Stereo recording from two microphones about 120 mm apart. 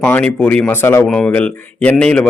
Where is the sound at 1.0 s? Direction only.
5° left (ahead or behind).